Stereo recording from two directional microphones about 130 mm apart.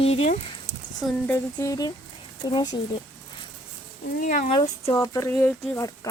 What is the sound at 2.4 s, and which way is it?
Speech, 35° left (ahead or behind).